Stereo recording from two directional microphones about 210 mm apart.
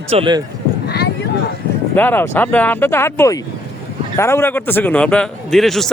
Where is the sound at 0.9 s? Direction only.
50° left (ahead or behind).